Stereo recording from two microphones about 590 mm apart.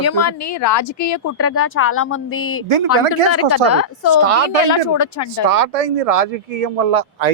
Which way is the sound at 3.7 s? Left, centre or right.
Left.